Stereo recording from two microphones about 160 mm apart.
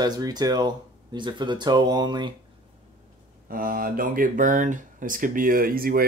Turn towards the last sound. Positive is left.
turn(degrees=-65)  # may be behind; listen again after turning